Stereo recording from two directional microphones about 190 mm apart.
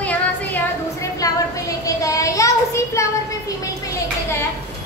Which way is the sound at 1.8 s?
15° left (ahead or behind).